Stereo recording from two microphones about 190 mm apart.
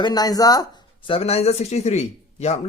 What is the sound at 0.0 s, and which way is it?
Speech, 20° left (ahead or behind).